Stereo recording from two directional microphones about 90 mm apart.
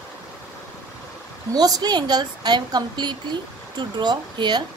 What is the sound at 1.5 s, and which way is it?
A woman's voice, 45° right (ahead or behind).